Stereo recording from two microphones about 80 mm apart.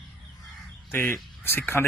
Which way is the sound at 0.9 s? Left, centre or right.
Left.